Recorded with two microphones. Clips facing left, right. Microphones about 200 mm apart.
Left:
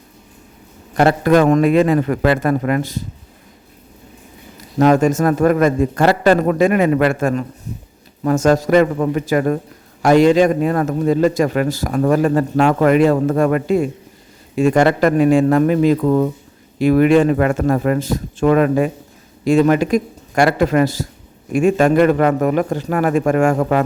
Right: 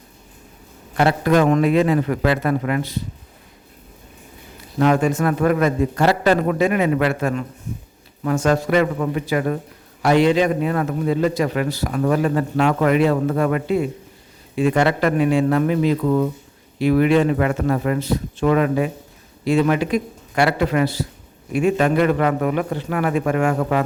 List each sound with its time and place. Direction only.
0.9 s a man's voice: 50° left (ahead or behind)
4.8 s a man's voice: 45° left (ahead or behind)